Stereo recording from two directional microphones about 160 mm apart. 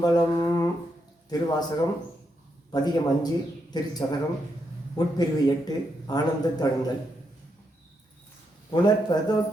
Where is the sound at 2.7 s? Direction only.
25° left (ahead or behind).